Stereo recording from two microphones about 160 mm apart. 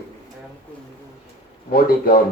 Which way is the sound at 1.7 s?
65° left (ahead or behind).